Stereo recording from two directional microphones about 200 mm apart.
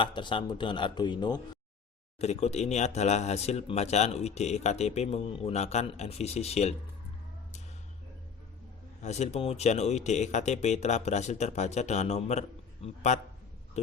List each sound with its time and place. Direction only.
0.0 s speech: 25° left (ahead or behind)
2.1 s speech: 35° left (ahead or behind)
9.0 s speech: 35° left (ahead or behind)